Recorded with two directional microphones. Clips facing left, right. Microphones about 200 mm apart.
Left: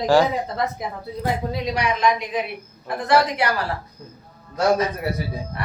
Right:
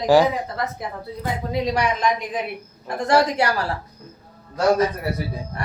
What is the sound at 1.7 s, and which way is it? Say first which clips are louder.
Speech: even; 50° right (ahead or behind).